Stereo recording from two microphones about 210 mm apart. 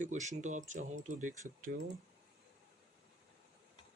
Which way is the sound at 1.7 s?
50° right (ahead or behind).